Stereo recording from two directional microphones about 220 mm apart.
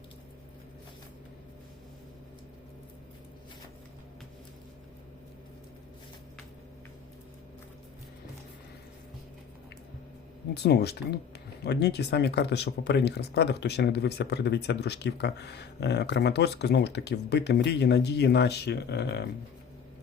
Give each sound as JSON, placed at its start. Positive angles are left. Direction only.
{"t": 10.5, "sound": "speech", "side_deg": 50}